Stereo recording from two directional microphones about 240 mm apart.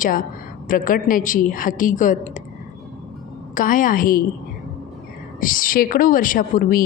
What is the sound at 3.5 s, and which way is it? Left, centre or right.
Speech, left.